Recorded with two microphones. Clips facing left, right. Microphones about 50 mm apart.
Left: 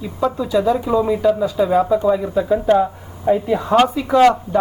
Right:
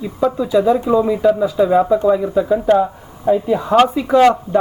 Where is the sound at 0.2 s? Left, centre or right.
Centre.